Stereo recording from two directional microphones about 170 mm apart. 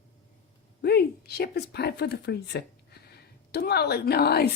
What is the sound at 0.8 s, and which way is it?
Speech, 70° left (ahead or behind).